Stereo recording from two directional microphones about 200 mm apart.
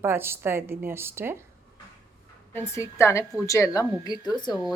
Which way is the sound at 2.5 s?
15° left (ahead or behind).